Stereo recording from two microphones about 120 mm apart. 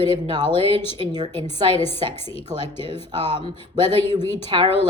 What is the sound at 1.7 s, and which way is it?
A woman's voice, 50° left (ahead or behind).